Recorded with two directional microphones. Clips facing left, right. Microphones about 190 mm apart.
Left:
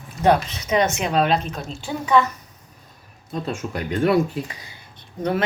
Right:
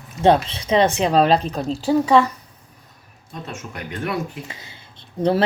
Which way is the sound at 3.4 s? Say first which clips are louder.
Left 4 dB; 30° left (ahead or behind).